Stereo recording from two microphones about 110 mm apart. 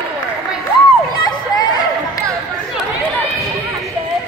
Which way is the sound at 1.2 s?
40° left (ahead or behind).